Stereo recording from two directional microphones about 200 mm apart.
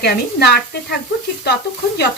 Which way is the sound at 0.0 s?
55° left (ahead or behind).